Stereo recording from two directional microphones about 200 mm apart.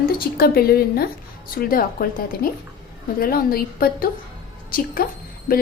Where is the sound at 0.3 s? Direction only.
50° left (ahead or behind).